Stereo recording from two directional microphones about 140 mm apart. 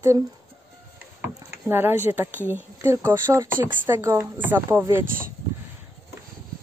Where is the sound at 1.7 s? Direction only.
15° right (ahead or behind).